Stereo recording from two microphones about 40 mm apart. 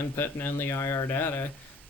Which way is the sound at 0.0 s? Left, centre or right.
Left.